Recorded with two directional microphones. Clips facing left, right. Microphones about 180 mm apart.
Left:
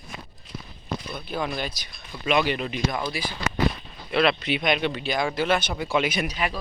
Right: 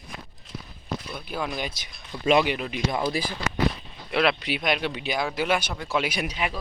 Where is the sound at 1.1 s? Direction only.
5° right (ahead or behind).